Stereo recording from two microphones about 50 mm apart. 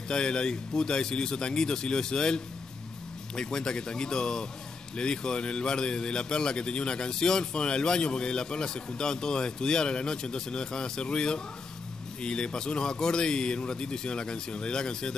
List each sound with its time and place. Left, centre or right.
0.1 s a man's voice: centre